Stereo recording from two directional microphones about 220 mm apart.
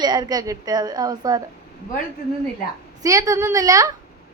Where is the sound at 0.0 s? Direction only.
20° right (ahead or behind).